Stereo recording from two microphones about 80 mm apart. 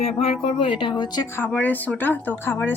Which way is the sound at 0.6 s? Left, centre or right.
Left.